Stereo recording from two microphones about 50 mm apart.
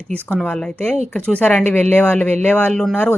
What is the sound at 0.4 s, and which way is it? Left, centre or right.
Speech, left.